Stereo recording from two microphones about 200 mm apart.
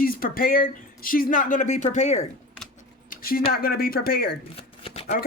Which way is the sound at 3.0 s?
45° left (ahead or behind).